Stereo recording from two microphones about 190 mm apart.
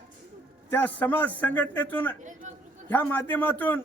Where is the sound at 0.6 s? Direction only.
10° left (ahead or behind).